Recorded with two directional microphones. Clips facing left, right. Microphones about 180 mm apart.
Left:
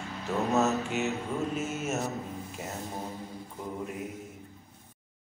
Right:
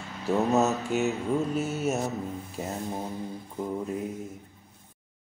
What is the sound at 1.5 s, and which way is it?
Mantra, 35° right (ahead or behind).